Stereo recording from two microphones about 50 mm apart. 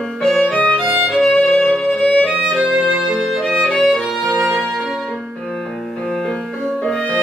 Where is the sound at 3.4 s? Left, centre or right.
Centre.